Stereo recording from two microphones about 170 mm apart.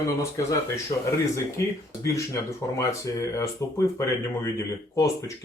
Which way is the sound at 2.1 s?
20° left (ahead or behind).